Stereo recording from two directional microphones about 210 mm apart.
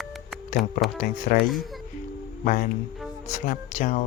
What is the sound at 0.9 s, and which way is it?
Speech, 40° left (ahead or behind).